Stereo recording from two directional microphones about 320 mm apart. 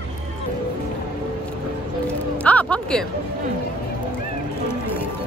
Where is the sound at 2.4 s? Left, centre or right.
Centre.